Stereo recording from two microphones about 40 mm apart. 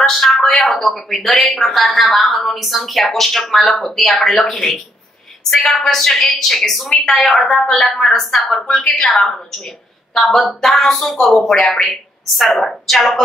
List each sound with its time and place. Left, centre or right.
0.0 s a woman's voice: centre
8.6 s a woman's voice: left; by 13.2 s centre